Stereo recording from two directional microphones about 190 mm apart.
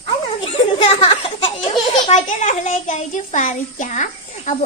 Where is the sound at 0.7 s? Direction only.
25° left (ahead or behind).